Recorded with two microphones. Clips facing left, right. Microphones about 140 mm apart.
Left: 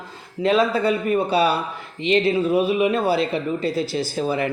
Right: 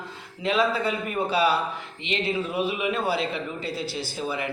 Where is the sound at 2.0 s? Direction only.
40° left (ahead or behind).